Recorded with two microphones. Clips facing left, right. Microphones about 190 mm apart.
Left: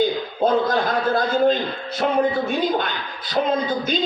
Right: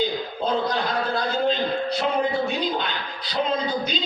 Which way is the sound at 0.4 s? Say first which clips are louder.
Left 6 dB; 50° left (ahead or behind).